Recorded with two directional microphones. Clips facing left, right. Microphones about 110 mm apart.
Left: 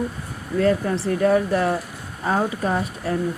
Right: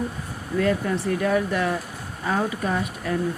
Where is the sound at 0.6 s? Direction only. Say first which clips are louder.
Left 3 dB; 30° left (ahead or behind).